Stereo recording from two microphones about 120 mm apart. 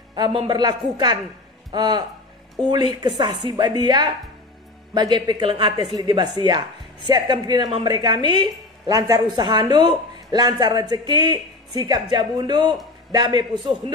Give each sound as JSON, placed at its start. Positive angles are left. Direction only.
{"t": 0.1, "sound": "a woman's voice", "side_deg": -40}